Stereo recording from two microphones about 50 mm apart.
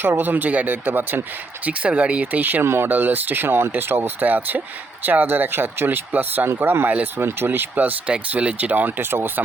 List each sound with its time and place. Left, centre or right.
0.0 s speech: right
1.6 s speech: right
2.2 s speech: right
2.6 s speech: right
2.9 s speech: right
4.3 s speech: right
6.5 s speech: right